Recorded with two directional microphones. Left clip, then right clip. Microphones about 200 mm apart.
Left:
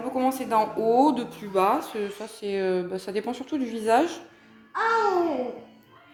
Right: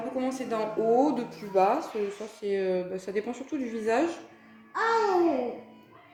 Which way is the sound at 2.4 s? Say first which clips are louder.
Left 2 dB; 45° left (ahead or behind).